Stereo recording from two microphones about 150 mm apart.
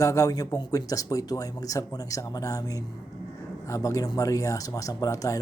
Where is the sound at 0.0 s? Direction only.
20° left (ahead or behind).